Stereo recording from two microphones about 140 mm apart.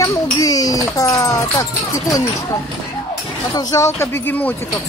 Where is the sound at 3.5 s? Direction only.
25° left (ahead or behind).